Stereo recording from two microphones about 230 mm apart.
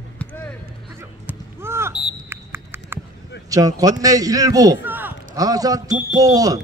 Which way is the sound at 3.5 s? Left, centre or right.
Centre.